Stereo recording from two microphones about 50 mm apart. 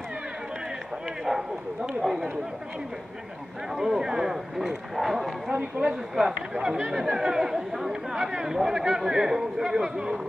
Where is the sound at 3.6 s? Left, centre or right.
Centre.